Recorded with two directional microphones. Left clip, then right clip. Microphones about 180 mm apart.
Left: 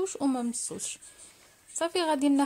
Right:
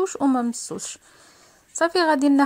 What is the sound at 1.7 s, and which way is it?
Speech, 30° right (ahead or behind).